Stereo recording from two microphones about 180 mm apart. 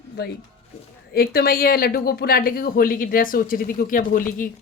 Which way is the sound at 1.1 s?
60° left (ahead or behind).